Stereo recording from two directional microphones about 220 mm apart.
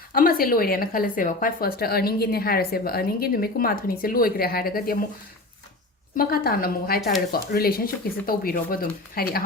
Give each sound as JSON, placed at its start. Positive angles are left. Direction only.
{"t": 0.1, "sound": "a woman's voice", "side_deg": 40}
{"t": 6.1, "sound": "a woman's voice", "side_deg": 40}